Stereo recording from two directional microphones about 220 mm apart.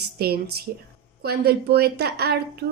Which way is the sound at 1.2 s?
45° right (ahead or behind).